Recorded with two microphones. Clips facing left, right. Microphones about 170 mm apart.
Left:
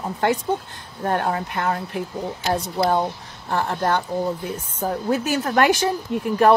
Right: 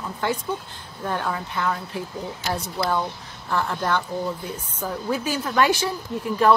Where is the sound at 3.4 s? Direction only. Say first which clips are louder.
Left 2 dB; 45° left (ahead or behind).